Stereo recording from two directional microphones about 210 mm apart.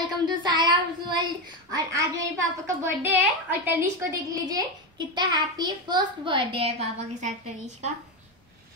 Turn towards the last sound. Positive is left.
turn(degrees=-35)  # may be behind; listen again after turning